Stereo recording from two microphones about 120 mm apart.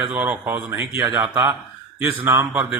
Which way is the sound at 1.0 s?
40° right (ahead or behind).